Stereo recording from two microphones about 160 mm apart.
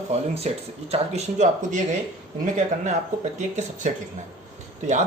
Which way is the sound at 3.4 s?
50° right (ahead or behind).